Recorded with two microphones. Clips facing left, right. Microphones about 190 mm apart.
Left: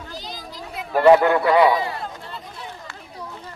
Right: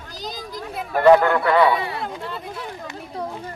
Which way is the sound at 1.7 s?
65° right (ahead or behind).